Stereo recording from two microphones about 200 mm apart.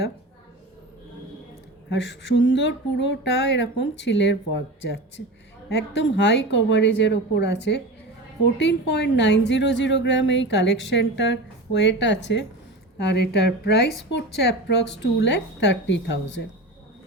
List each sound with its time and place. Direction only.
1.9 s a woman's voice: 65° left (ahead or behind)